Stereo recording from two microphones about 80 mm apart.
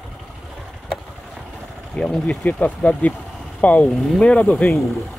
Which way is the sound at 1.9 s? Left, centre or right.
Centre.